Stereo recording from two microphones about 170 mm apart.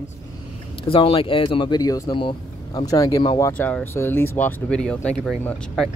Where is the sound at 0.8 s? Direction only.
35° left (ahead or behind).